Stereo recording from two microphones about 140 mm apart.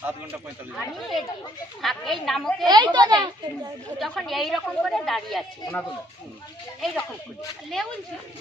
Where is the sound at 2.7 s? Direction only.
30° right (ahead or behind).